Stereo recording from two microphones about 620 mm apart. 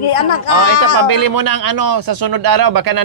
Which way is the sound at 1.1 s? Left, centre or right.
Right.